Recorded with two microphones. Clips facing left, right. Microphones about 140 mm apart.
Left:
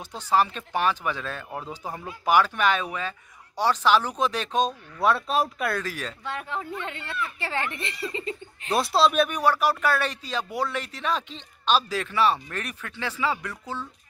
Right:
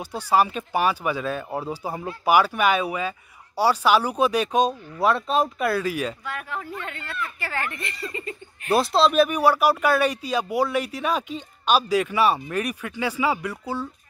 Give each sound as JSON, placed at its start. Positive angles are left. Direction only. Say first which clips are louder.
{"t": 0.0, "sound": "speech", "louder": "right 2 dB", "side_deg": -10}
{"t": 5.0, "sound": "speech", "louder": "right 2 dB", "side_deg": 0}
{"t": 6.2, "sound": "speech", "louder": "even", "side_deg": 25}
{"t": 8.7, "sound": "speech", "louder": "right 3 dB", "side_deg": 0}